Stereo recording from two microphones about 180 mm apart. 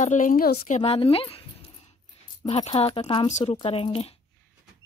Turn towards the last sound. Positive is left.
turn(degrees=35)  # may be behind; listen again after turning